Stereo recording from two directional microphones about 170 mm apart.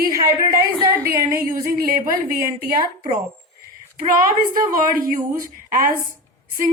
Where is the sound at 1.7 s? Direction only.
60° right (ahead or behind).